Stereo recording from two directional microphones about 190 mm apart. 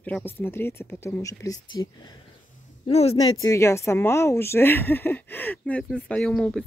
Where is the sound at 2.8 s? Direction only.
30° left (ahead or behind).